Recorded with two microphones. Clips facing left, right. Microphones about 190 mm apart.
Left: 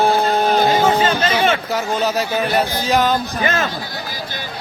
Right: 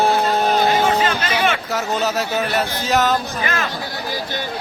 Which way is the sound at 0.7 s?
30° left (ahead or behind).